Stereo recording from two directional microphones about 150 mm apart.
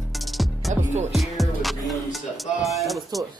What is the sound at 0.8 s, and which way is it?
Music, 50° right (ahead or behind).